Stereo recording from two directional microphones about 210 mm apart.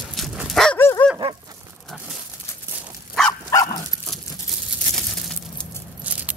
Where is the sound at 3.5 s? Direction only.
20° left (ahead or behind).